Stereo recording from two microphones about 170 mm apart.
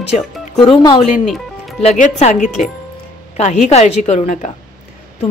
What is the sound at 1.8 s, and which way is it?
A woman's voice, 40° left (ahead or behind).